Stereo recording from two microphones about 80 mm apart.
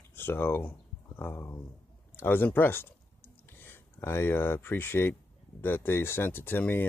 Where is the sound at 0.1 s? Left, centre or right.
Left.